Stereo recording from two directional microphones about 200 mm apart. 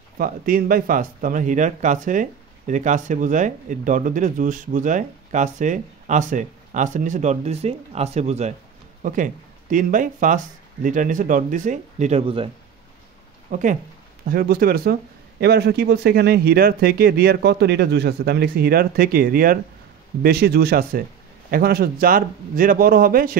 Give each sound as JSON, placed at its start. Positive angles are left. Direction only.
{"t": 0.2, "sound": "speech", "side_deg": -45}
{"t": 13.5, "sound": "speech", "side_deg": -40}